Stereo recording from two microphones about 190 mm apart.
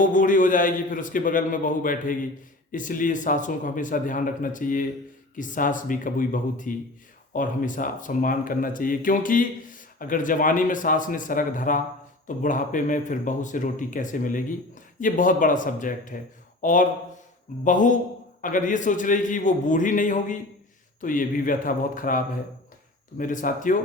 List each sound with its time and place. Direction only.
0.0 s speech: 45° left (ahead or behind)